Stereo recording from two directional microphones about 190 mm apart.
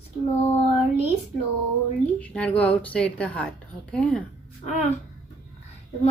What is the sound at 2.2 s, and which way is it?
A woman's voice, 5° left (ahead or behind).